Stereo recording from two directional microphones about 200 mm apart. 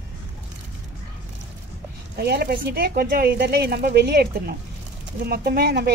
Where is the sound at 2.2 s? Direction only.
50° right (ahead or behind).